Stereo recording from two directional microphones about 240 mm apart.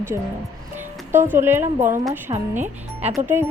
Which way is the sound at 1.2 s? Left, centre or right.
Centre.